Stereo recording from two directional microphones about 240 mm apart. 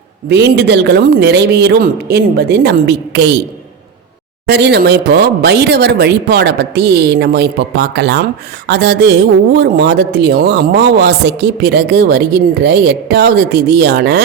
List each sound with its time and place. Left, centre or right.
0.3 s speech: right
4.4 s speech: right